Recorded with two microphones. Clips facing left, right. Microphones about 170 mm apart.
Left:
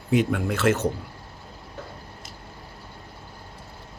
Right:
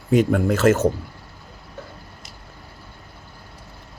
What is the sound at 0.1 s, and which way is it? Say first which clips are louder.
Speech: right 5 dB; 40° right (ahead or behind).